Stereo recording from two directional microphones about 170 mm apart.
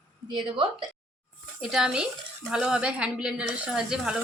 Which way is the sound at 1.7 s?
5° right (ahead or behind).